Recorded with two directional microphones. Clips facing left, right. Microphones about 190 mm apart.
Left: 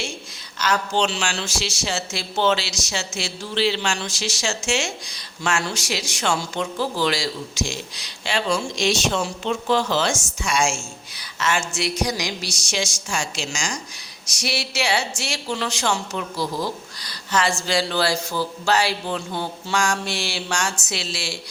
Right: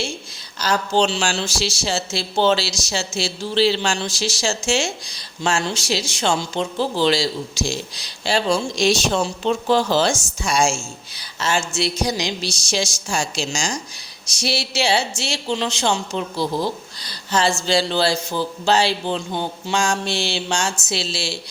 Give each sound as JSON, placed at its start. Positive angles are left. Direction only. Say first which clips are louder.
{"t": 0.6, "sound": "speech", "louder": "right 3 dB", "side_deg": -35}